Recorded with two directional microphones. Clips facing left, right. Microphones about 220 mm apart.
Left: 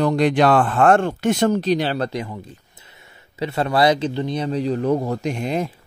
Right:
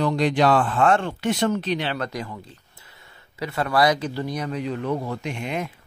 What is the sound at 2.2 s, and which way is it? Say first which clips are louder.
A man's voice: left 3 dB; 20° left (ahead or behind).